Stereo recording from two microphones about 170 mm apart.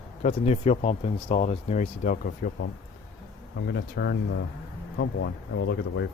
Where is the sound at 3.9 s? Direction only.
75° left (ahead or behind).